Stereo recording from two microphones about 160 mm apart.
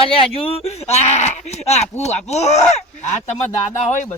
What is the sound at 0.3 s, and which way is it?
Speech, 35° left (ahead or behind).